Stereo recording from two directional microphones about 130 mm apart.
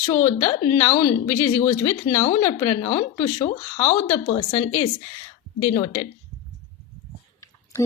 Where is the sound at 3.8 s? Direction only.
20° left (ahead or behind).